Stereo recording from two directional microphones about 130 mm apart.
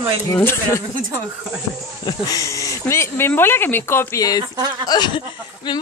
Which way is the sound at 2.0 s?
25° left (ahead or behind).